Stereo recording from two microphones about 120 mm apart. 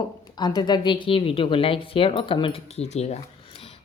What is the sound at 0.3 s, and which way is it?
A woman's voice, 35° left (ahead or behind).